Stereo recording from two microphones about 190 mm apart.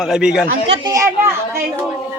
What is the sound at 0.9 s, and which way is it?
Speech, 15° right (ahead or behind).